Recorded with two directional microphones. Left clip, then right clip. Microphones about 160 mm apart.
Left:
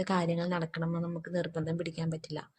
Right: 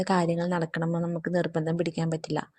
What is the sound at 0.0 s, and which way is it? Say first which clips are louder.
A woman's voice: right 5 dB; 40° right (ahead or behind).